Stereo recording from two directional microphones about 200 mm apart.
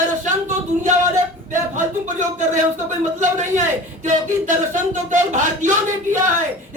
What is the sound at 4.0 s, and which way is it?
Speech, 40° right (ahead or behind).